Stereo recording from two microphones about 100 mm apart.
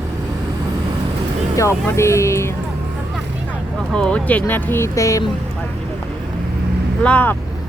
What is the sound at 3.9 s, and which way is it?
Speech, 10° left (ahead or behind).